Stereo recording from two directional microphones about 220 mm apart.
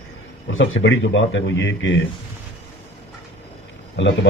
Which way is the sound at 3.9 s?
55° left (ahead or behind).